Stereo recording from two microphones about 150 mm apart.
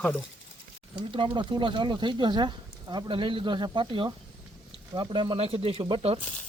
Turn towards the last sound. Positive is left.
turn(degrees=-40)  # may be behind; listen again after turning